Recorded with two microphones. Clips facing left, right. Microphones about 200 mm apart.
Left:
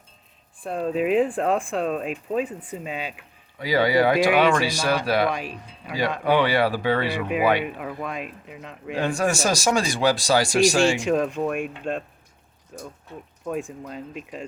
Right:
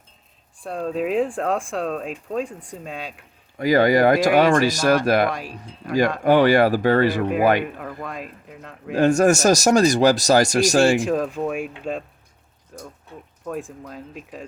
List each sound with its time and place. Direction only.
0.6 s speech: centre (ahead or behind)
3.6 s speech: 45° right (ahead or behind)
5.8 s speech: centre (ahead or behind)
6.2 s speech: 45° right (ahead or behind)
7.6 s speech: 5° left (ahead or behind)
8.9 s speech: 45° right (ahead or behind)
10.9 s speech: centre (ahead or behind)
13.4 s speech: centre (ahead or behind)